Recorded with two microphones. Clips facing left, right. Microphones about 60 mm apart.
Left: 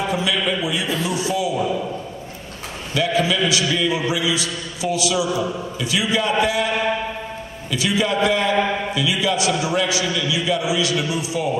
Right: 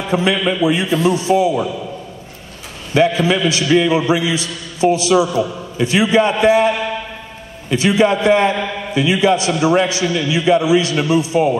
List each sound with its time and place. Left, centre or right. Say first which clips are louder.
0.1 s a man's voice: right 5 dB; right
2.9 s a man's voice: right 6 dB; right
7.7 s a man's voice: right 7 dB; right